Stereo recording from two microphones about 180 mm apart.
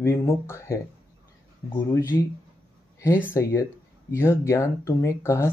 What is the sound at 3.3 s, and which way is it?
Speech, 15° left (ahead or behind).